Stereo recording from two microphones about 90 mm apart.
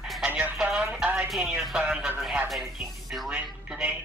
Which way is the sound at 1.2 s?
5° right (ahead or behind).